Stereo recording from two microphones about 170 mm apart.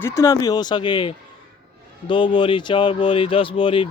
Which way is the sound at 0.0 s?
15° left (ahead or behind).